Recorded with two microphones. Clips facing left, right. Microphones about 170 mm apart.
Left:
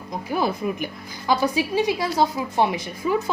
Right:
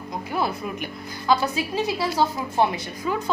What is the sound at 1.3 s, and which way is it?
A woman's voice, 15° left (ahead or behind).